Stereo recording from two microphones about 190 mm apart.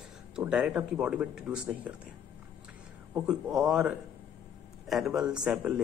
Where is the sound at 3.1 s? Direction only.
5° right (ahead or behind).